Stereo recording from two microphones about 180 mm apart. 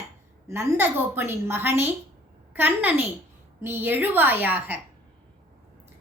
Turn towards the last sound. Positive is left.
turn(degrees=-10)  # may be behind; listen again after turning